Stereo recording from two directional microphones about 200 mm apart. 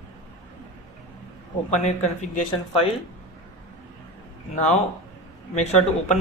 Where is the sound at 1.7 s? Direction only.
35° left (ahead or behind).